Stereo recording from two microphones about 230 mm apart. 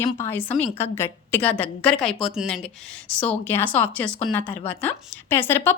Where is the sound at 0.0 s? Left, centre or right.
Centre.